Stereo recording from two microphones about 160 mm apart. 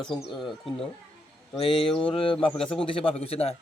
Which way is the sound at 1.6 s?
35° left (ahead or behind).